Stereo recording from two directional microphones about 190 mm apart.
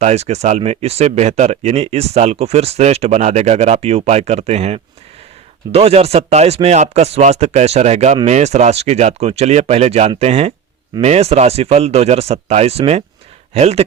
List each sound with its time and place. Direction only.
0.0 s speech: 35° right (ahead or behind)